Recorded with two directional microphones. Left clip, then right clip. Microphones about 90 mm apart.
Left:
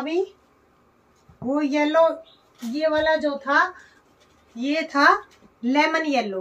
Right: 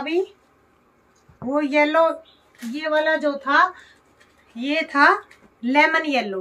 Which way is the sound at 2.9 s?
70° right (ahead or behind).